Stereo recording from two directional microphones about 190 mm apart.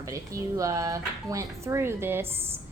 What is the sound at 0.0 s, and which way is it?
A woman's voice, 15° right (ahead or behind).